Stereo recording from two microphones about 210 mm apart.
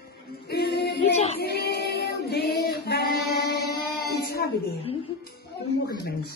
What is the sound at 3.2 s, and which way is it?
Music, 50° left (ahead or behind).